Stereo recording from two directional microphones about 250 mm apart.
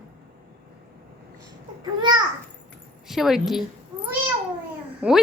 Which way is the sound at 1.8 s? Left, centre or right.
Centre.